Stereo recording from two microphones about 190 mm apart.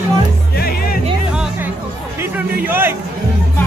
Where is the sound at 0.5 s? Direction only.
55° left (ahead or behind).